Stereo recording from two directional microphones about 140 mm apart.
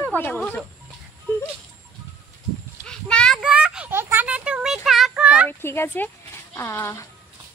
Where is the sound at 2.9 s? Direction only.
5° left (ahead or behind).